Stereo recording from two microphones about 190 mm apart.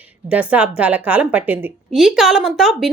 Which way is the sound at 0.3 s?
5° right (ahead or behind).